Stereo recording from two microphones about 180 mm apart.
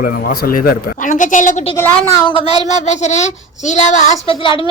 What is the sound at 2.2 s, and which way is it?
Speech, 30° left (ahead or behind).